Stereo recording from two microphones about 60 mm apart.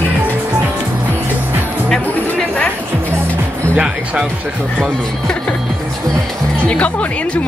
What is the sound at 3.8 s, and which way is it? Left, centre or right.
Music, centre.